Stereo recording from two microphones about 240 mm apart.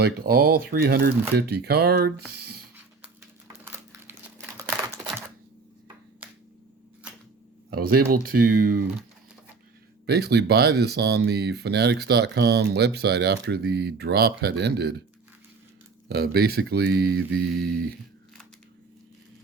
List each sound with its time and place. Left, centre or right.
0.0 s speech: right
3.6 s crumpling: centre
7.7 s speech: right
10.1 s speech: right
16.0 s speech: right
17.2 s mantra: right